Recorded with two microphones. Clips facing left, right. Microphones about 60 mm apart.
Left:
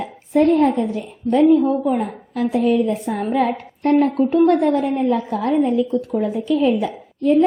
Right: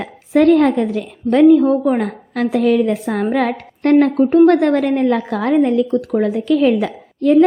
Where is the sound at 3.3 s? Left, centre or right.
Right.